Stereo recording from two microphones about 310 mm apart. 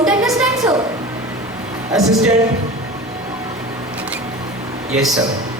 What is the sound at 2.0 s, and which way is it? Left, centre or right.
Music, right.